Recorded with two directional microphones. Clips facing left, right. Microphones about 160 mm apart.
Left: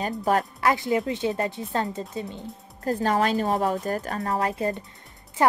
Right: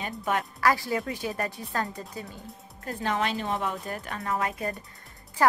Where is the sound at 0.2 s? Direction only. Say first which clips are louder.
Left 5 dB; 40° left (ahead or behind).